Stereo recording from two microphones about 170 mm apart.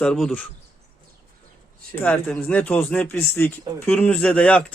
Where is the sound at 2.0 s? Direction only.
10° left (ahead or behind).